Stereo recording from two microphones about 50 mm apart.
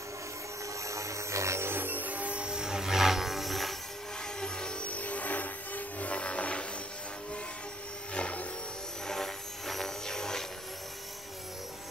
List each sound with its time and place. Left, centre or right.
0.8 s music: right
1.7 s music: right
2.4 s music: centre
4.4 s a sound: centre
8.1 s a sound: left
9.0 s vehicle: centre